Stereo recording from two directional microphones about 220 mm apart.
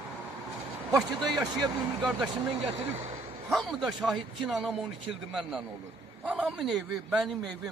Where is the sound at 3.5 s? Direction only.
Centre (ahead or behind).